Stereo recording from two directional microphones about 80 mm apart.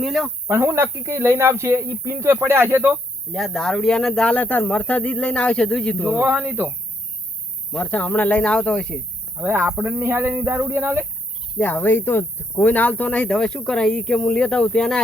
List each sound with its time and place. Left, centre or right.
0.0 s cricket: centre
0.4 s speech: right
3.3 s speech: centre
6.0 s speech: right
7.8 s speech: centre
9.4 s speech: right
9.7 s speech: centre
11.5 s speech: left